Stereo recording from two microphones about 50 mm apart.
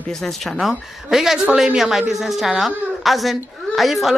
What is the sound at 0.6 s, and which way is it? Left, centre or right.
Speech, centre.